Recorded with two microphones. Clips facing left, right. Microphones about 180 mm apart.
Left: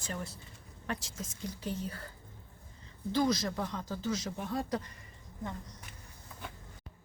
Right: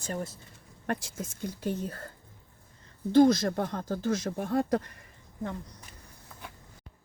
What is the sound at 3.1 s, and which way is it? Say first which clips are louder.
Speech: right 9 dB; 50° right (ahead or behind).